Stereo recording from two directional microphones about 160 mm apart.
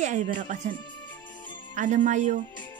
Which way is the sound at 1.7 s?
50° right (ahead or behind).